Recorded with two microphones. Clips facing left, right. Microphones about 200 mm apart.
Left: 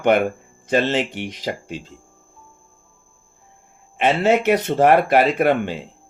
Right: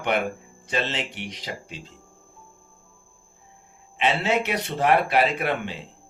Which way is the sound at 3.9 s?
50° left (ahead or behind).